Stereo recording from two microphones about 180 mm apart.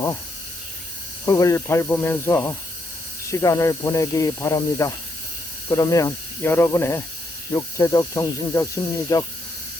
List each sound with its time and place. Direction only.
1.2 s speech: 20° left (ahead or behind)